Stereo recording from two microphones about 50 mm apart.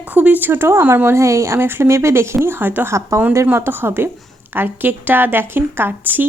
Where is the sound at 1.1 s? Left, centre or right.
Right.